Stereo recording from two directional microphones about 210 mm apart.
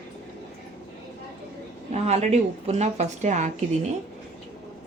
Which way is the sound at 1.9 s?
30° right (ahead or behind).